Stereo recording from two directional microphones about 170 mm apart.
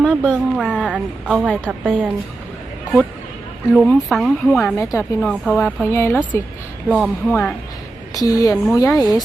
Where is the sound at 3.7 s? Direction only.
Centre (ahead or behind); by 6.5 s 15° left (ahead or behind).